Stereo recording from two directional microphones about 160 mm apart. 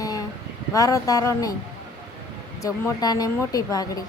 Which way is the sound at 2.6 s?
20° left (ahead or behind).